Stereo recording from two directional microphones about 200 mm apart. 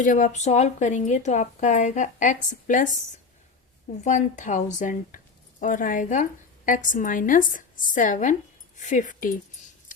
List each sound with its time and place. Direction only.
0.0 s speech: 40° left (ahead or behind)
4.0 s speech: 40° left (ahead or behind)